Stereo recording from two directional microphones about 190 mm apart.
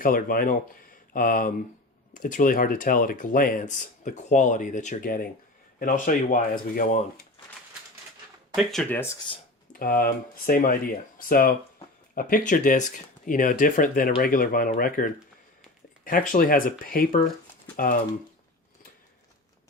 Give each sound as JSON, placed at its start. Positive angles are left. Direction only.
{"t": 0.0, "sound": "speech", "side_deg": 50}
{"t": 8.5, "sound": "speech", "side_deg": 5}
{"t": 9.7, "sound": "speech", "side_deg": 50}